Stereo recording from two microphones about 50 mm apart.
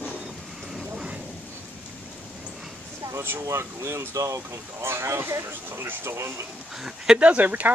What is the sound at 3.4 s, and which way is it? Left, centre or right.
Speech, right.